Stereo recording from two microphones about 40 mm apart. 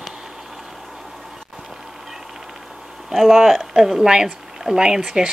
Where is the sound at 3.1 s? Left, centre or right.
Centre.